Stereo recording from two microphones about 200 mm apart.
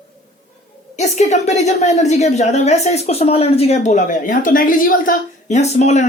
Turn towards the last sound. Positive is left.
turn(degrees=35)  # may be behind; listen again after turning